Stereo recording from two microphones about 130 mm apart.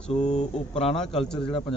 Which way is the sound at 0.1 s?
60° left (ahead or behind).